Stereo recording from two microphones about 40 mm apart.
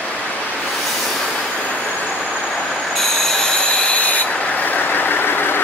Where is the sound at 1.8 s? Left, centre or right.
Left.